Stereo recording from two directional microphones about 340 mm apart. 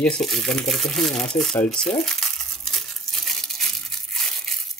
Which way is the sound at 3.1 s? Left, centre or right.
Centre.